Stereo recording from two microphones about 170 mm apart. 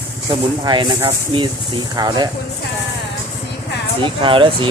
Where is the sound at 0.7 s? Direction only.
25° right (ahead or behind).